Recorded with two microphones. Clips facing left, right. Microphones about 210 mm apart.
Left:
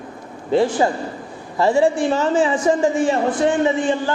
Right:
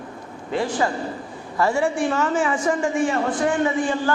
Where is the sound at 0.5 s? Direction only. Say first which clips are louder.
Left 6 dB; 25° left (ahead or behind).